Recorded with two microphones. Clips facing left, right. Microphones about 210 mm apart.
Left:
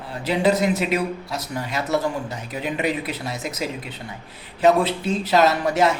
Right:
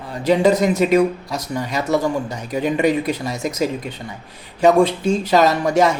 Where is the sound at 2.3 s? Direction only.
45° right (ahead or behind).